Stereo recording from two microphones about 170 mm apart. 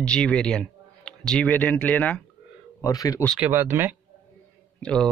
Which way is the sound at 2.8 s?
20° left (ahead or behind).